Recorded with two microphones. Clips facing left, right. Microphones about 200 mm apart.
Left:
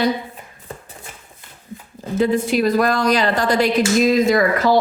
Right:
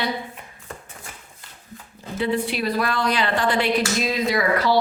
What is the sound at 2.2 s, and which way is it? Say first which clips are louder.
A woman's voice: left 6 dB; 45° left (ahead or behind).